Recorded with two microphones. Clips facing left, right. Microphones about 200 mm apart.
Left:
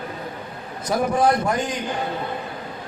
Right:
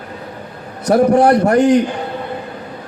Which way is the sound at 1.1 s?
70° right (ahead or behind).